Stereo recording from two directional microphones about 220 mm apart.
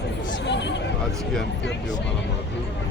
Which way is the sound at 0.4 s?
55° left (ahead or behind).